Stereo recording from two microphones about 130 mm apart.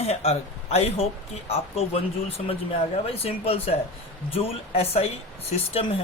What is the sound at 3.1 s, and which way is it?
Speech, 50° left (ahead or behind).